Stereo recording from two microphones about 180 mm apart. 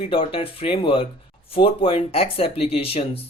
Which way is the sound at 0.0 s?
30° left (ahead or behind).